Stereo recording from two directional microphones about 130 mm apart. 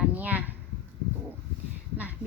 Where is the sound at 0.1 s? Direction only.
10° right (ahead or behind).